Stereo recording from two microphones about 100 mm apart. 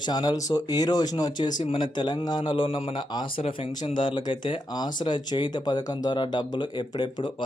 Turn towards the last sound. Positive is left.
turn(degrees=50)  # may be behind; listen again after turning